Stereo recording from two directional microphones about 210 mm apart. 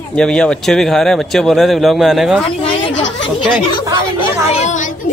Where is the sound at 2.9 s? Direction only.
60° left (ahead or behind).